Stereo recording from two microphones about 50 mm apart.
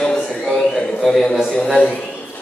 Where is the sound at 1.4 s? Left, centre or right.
Left.